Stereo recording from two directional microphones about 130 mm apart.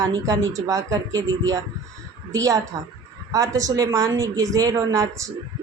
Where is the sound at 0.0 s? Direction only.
25° right (ahead or behind).